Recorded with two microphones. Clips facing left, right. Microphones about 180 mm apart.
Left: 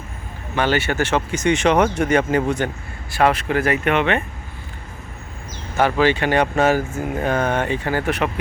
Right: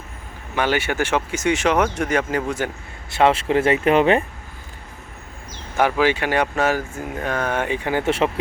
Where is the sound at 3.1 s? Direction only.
25° right (ahead or behind).